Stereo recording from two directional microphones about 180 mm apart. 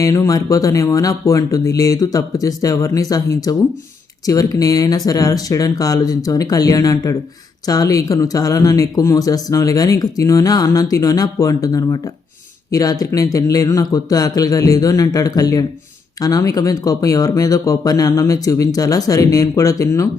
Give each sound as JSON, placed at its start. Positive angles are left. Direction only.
{"t": 0.0, "sound": "speech", "side_deg": 20}